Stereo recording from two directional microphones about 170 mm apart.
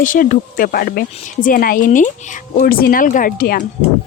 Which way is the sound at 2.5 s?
60° left (ahead or behind).